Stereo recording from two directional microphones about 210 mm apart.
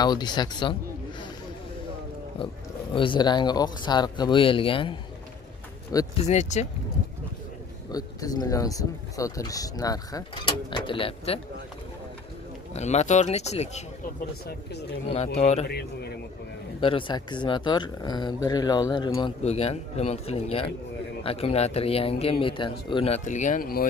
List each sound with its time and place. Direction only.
0.0 s speech: 20° left (ahead or behind)
2.9 s speech: 25° left (ahead or behind)
6.2 s speech: 30° left (ahead or behind)
7.9 s speech: 15° left (ahead or behind)
12.7 s speech: 35° left (ahead or behind)
15.1 s speech: 30° left (ahead or behind)
15.6 s a man's voice: 50° left (ahead or behind)
16.8 s speech: 25° left (ahead or behind); by 23.9 s 45° left (ahead or behind)